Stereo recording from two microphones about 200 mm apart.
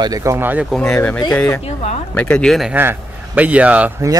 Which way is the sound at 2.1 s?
5° left (ahead or behind).